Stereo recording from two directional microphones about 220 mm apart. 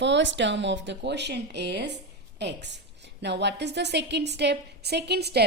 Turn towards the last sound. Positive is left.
turn(degrees=-50)  # may be behind; listen again after turning